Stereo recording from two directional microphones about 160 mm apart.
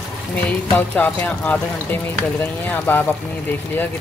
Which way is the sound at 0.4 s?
10° left (ahead or behind).